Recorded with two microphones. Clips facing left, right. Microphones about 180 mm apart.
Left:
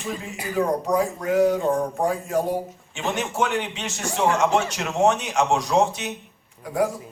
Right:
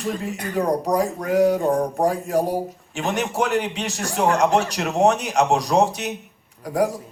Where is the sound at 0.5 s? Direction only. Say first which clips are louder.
Right 1 dB; 35° right (ahead or behind).